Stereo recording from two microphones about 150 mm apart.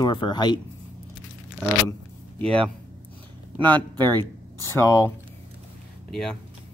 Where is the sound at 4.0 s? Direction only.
25° right (ahead or behind).